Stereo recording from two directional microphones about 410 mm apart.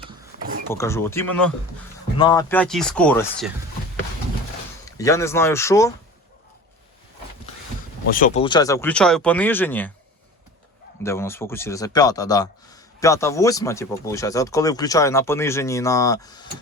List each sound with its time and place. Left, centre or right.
0.0 s a sound: centre
0.7 s speech: centre
4.9 s speech: centre
8.1 s speech: centre
11.0 s speech: centre